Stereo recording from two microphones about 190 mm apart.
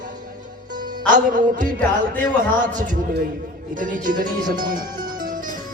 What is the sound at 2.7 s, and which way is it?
Speech, 45° right (ahead or behind).